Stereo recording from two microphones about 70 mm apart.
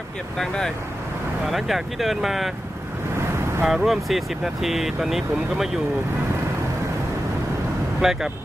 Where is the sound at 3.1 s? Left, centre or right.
Right.